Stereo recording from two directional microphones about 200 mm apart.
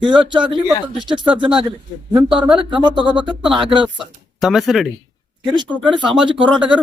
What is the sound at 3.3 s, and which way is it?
Speech, 25° right (ahead or behind).